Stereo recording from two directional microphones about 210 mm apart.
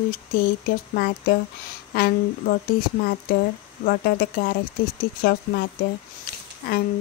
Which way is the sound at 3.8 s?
40° left (ahead or behind).